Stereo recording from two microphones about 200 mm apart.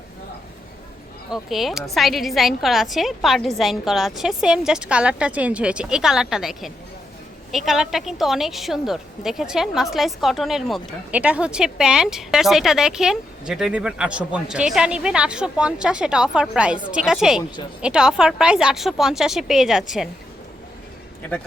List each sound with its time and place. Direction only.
1.3 s speech: centre (ahead or behind)